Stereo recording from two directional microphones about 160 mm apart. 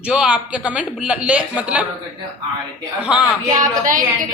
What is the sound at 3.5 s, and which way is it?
Speech, 55° right (ahead or behind).